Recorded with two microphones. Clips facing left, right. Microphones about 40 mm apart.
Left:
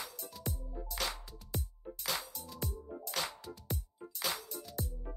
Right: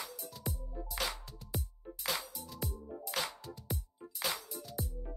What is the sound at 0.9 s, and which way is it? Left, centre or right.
Music, centre.